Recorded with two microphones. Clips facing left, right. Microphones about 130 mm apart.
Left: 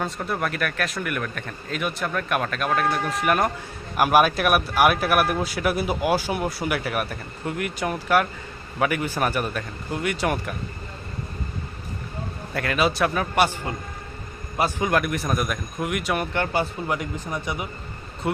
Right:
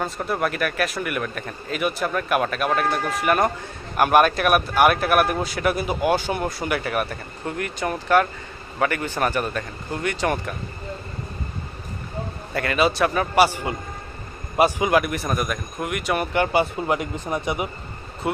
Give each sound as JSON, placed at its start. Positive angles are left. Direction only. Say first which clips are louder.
{"t": 0.0, "sound": "speech", "louder": "right 2 dB", "side_deg": -5}
{"t": 12.5, "sound": "speech", "louder": "right 2 dB", "side_deg": 0}
{"t": 14.5, "sound": "speech", "louder": "right 5 dB", "side_deg": -20}
{"t": 14.8, "sound": "speech", "louder": "right 2 dB", "side_deg": -5}
{"t": 16.8, "sound": "speech", "louder": "right 3 dB", "side_deg": -25}